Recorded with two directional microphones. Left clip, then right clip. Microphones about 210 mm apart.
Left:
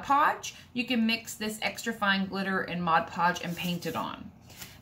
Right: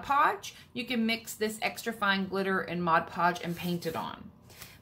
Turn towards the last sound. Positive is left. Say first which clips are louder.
# left 1 dB
turn(degrees=-30)  # may be behind; listen again after turning